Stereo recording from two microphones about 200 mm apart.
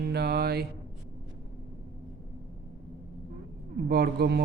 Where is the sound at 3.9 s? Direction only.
55° right (ahead or behind).